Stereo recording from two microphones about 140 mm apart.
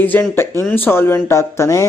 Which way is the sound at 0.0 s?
15° left (ahead or behind).